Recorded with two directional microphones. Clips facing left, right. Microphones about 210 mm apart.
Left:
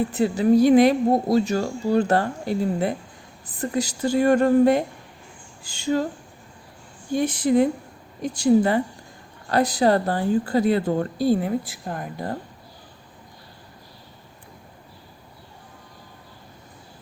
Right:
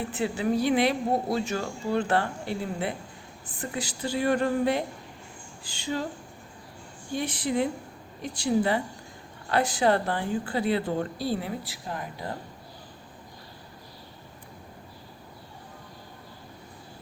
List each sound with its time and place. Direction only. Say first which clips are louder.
0.1 s a woman's voice: left 7 dB; 40° left (ahead or behind)
7.1 s a woman's voice: left 8 dB; 45° left (ahead or behind)